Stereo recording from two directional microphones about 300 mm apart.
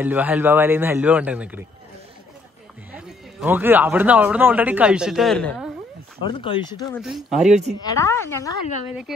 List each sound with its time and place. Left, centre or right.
0.0 s a man's voice: centre
2.9 s a man's voice: centre
6.2 s a woman's voice: centre
7.0 s a man's voice: centre
7.5 s speech: right
7.8 s a woman's voice: centre